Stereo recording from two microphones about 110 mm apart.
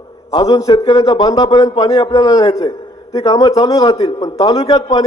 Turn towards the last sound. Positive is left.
turn(degrees=35)  # may be behind; listen again after turning